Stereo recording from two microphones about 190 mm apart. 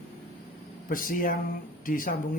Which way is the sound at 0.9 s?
45° left (ahead or behind).